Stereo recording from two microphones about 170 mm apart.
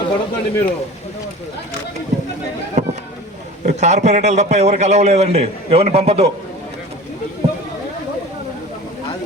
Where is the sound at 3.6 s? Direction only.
40° right (ahead or behind).